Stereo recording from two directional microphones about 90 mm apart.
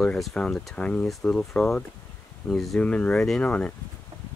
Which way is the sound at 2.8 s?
15° left (ahead or behind).